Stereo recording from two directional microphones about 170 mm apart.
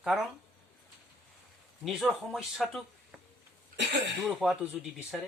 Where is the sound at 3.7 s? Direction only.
90° right.